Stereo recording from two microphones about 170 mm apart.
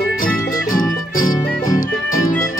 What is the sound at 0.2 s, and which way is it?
Music, 55° left (ahead or behind).